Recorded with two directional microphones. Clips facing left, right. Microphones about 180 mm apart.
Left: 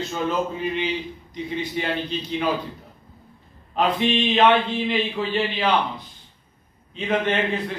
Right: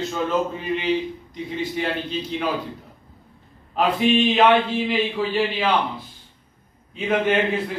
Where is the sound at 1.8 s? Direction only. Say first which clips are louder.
Right 1 dB; centre (ahead or behind).